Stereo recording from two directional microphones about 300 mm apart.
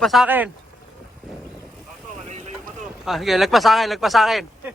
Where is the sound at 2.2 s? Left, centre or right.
Right.